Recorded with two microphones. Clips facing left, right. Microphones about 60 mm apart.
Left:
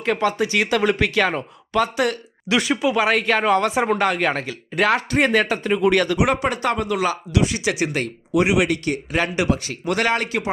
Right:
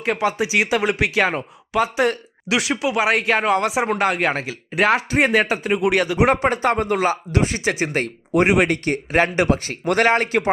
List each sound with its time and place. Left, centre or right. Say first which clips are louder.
0.0 s speech: even; centre
3.1 s speech: right 2 dB; centre
6.1 s speech: right 3 dB; right